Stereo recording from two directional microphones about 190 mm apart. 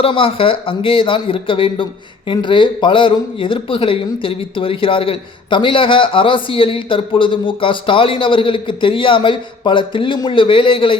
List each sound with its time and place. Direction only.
0.0 s speech: 30° left (ahead or behind)